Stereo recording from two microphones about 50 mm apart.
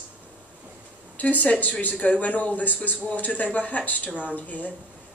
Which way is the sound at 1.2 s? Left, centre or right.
Left.